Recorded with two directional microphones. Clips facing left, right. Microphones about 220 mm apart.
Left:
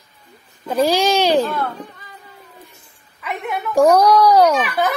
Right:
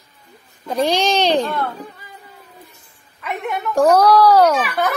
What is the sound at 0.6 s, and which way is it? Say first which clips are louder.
Speech: left 2 dB; 5° left (ahead or behind).